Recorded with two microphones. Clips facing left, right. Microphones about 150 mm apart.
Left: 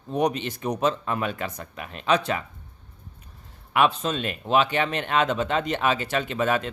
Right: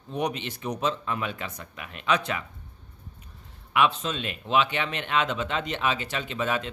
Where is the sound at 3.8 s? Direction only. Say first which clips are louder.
Left 2 dB; 40° left (ahead or behind).